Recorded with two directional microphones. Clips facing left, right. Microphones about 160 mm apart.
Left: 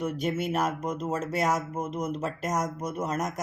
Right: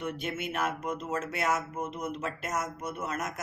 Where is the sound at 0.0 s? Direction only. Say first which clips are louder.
Left 6 dB; 40° left (ahead or behind).